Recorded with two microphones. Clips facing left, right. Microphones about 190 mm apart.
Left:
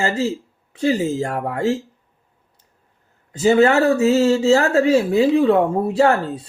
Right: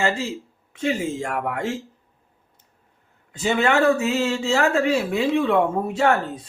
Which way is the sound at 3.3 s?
35° left (ahead or behind).